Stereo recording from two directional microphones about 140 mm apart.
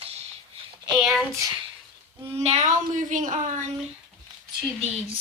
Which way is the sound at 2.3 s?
50° right (ahead or behind).